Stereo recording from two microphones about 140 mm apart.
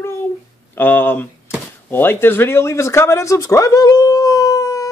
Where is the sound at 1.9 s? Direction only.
15° left (ahead or behind).